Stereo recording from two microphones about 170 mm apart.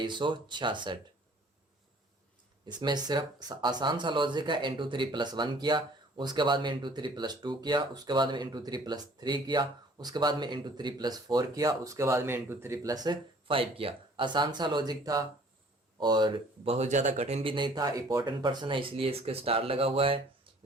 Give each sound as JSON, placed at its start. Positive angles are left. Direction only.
{"t": 0.0, "sound": "speech", "side_deg": -25}
{"t": 2.6, "sound": "speech", "side_deg": -25}